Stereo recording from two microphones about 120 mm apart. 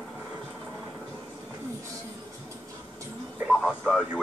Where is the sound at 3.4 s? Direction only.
Centre (ahead or behind).